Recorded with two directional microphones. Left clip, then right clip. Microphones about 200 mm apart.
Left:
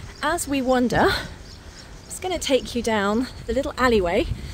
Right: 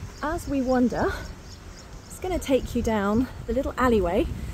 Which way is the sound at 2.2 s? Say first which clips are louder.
Left 3 dB; 20° left (ahead or behind).